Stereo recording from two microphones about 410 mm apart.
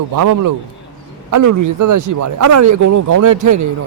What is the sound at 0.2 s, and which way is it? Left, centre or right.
Speech, right.